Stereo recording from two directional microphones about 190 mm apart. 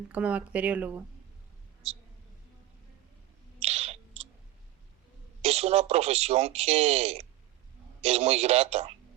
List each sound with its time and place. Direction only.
0.1 s speech: 5° right (ahead or behind)
1.8 s speech: 30° right (ahead or behind)
3.6 s a sound: 35° right (ahead or behind)
5.4 s speech: 35° right (ahead or behind)